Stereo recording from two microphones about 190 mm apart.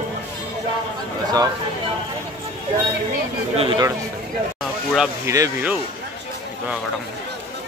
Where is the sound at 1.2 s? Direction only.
20° right (ahead or behind).